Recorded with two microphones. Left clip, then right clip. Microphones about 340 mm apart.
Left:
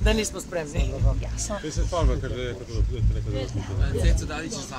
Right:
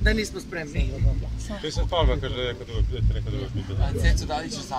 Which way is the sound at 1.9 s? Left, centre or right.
Right.